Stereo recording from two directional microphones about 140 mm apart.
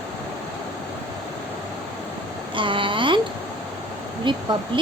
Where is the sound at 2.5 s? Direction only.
35° right (ahead or behind).